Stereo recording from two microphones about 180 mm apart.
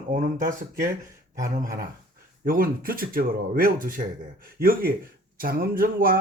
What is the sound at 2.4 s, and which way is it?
Speech, 55° right (ahead or behind).